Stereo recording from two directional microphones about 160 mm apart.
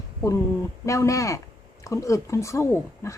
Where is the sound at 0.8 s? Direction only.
20° left (ahead or behind).